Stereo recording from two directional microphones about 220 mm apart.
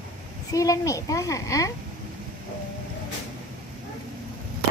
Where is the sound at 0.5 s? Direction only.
15° left (ahead or behind).